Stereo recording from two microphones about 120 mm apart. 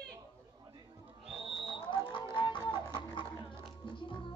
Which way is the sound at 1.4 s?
50° right (ahead or behind).